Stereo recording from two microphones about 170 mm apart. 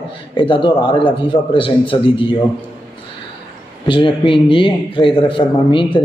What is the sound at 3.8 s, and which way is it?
A man's voice, 30° left (ahead or behind).